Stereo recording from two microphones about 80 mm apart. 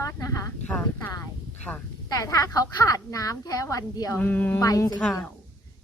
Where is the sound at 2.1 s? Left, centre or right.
Left.